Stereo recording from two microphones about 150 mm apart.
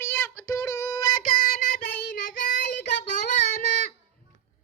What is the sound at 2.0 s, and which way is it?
Child singing, 60° left (ahead or behind).